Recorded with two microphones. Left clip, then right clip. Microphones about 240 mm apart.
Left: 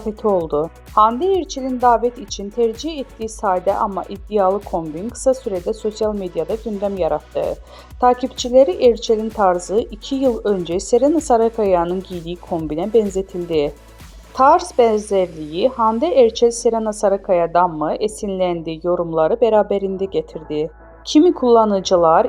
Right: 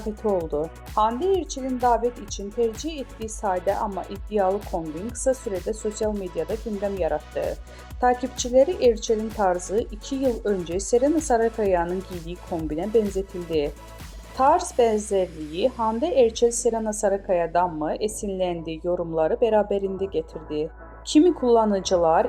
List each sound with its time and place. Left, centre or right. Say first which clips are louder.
0.4 s a woman's voice: left 7 dB; centre
6.5 s speech: left 6 dB; centre
6.8 s a woman's voice: left 6 dB; centre